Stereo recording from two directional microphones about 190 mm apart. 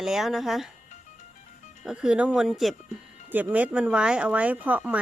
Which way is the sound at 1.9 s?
5° right (ahead or behind).